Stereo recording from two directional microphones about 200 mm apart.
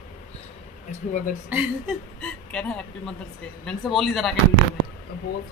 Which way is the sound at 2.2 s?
5° left (ahead or behind).